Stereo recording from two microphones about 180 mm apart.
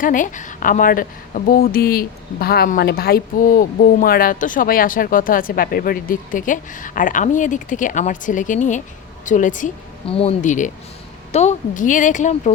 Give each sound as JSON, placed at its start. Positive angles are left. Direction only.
{"t": 0.0, "sound": "a woman's voice", "side_deg": 45}
{"t": 10.1, "sound": "a woman's voice", "side_deg": 35}